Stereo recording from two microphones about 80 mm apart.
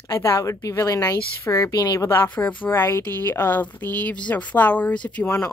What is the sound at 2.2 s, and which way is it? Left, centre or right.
Speech, centre.